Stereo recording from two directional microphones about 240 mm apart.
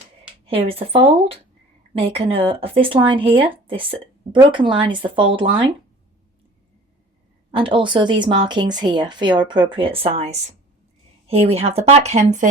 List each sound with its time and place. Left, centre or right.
0.4 s speech: right
7.5 s speech: right